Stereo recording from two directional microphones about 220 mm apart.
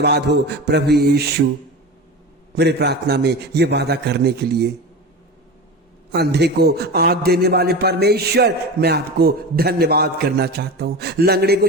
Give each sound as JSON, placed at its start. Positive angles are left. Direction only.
{"t": 0.0, "sound": "a man's voice", "side_deg": -50}
{"t": 2.6, "sound": "a man's voice", "side_deg": -50}
{"t": 6.1, "sound": "a man's voice", "side_deg": -50}